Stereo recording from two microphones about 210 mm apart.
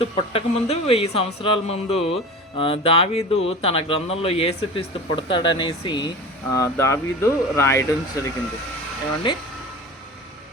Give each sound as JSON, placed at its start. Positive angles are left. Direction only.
{"t": 0.0, "sound": "speech", "side_deg": 30}